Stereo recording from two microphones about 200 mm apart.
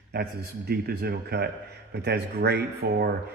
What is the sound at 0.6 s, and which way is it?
Speech, 55° right (ahead or behind).